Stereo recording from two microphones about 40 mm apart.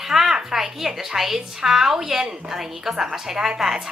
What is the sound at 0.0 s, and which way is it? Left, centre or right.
A woman's voice, centre.